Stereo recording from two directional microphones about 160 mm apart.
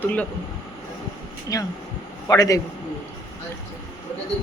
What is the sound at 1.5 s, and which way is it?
A man's voice, 20° left (ahead or behind).